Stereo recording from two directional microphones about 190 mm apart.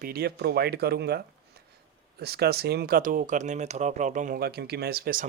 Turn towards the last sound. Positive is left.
turn(degrees=-50)  # may be behind; listen again after turning